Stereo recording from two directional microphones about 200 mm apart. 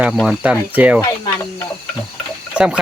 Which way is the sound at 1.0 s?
15° left (ahead or behind).